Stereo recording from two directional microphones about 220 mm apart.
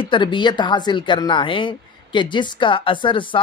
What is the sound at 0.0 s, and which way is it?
A woman's voice, 20° left (ahead or behind).